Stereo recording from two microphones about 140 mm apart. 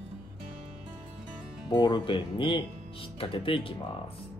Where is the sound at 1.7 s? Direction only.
30° left (ahead or behind).